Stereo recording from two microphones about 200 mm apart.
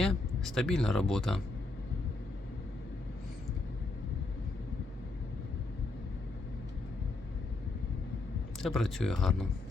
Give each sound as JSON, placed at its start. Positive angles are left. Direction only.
{"t": 0.0, "sound": "speech", "side_deg": 0}
{"t": 8.6, "sound": "speech", "side_deg": 0}